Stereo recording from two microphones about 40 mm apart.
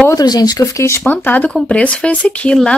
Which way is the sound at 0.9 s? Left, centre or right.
Left.